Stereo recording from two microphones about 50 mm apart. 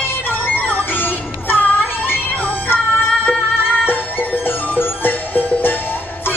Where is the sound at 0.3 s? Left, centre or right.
Left.